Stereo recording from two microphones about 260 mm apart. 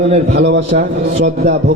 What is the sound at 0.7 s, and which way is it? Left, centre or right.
Speech, right.